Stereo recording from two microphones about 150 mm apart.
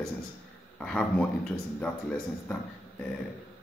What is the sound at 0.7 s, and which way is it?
Speech, 5° left (ahead or behind).